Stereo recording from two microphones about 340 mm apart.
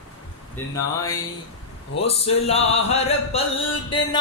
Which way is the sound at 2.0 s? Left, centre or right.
Centre.